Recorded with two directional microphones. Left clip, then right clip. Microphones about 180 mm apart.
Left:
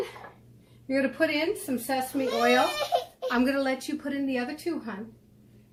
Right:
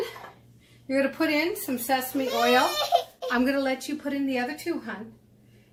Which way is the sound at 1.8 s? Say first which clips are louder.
Right 2 dB; 20° right (ahead or behind).